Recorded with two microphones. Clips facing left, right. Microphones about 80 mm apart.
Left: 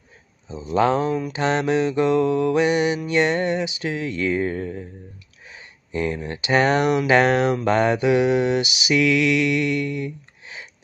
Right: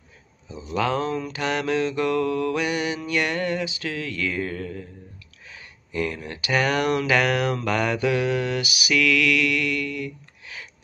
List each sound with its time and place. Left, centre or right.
0.5 s speech: left